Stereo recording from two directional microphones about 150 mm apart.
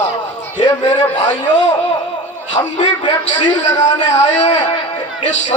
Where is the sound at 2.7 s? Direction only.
50° left (ahead or behind).